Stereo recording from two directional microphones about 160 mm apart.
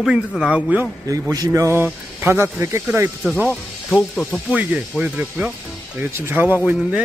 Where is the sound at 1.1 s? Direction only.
20° right (ahead or behind).